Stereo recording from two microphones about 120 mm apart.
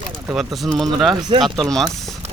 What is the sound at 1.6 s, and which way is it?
Speech, centre (ahead or behind).